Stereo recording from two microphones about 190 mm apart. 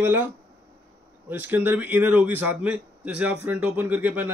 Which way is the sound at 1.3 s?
10° right (ahead or behind).